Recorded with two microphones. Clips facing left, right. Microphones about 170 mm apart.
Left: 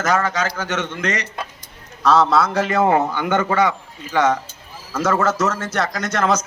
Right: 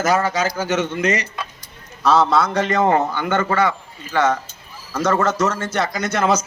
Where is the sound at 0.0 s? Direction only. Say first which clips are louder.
Right 1 dB; 5° right (ahead or behind).